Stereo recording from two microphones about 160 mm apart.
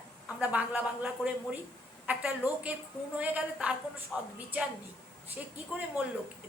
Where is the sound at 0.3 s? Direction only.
10° right (ahead or behind).